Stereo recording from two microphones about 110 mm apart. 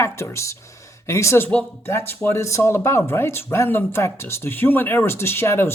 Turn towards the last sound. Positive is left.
turn(degrees=20)  # may be behind; listen again after turning